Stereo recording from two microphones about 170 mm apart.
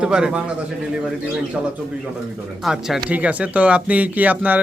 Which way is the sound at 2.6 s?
Centre (ahead or behind).